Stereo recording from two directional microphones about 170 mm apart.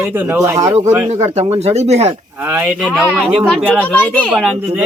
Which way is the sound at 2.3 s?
10° right (ahead or behind).